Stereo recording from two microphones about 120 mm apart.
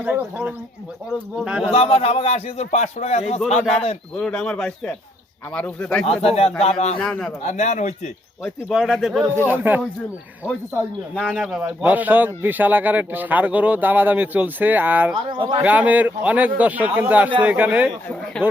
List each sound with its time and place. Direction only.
0.0 s speech: 15° right (ahead or behind)
1.7 s a man's voice: 50° left (ahead or behind)
4.1 s speech: 5° left (ahead or behind)
6.1 s a man's voice: 55° left (ahead or behind)
7.0 s speech: 5° left (ahead or behind)
7.4 s speech: 70° left (ahead or behind)
8.7 s speech: centre (ahead or behind)
9.5 s speech: 15° right (ahead or behind)
11.2 s speech: 5° right (ahead or behind)
15.3 s speech: 45° right (ahead or behind)
15.6 s speech: 15° right (ahead or behind)
18.4 s speech: 5° left (ahead or behind)